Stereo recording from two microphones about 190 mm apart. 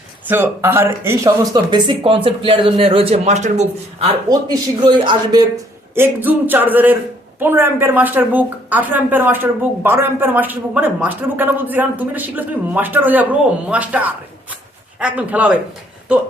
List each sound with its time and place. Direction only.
0.3 s speech: 10° right (ahead or behind); by 3.7 s 35° right (ahead or behind)
4.8 s speech: 25° right (ahead or behind)
5.9 s speech: 10° right (ahead or behind)